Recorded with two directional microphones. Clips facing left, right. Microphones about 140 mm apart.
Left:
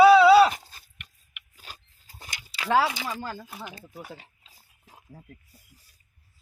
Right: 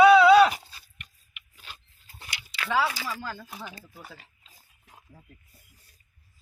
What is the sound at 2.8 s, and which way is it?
Speech, 20° left (ahead or behind).